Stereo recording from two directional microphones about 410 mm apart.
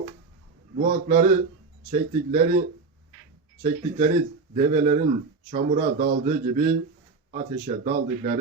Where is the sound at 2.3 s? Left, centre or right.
Centre.